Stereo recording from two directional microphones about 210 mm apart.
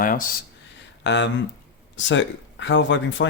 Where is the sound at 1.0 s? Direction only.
60° left (ahead or behind).